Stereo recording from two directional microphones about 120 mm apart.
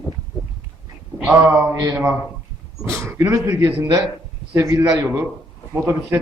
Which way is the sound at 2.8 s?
25° right (ahead or behind).